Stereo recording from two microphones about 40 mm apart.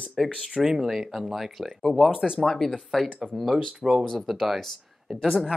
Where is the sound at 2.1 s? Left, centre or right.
Centre.